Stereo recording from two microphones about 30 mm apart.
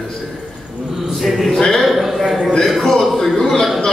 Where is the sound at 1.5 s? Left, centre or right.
Left.